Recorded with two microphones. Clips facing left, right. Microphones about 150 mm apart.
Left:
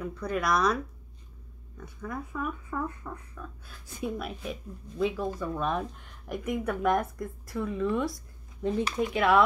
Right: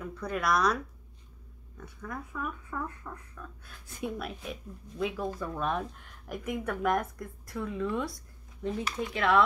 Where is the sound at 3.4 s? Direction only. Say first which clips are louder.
Left 3 dB; centre (ahead or behind).